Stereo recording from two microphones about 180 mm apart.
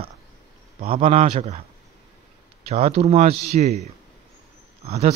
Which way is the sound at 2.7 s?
35° right (ahead or behind).